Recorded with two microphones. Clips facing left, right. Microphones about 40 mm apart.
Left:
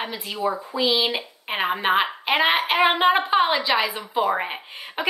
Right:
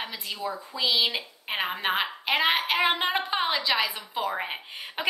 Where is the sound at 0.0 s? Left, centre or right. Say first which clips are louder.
Left 7 dB; centre.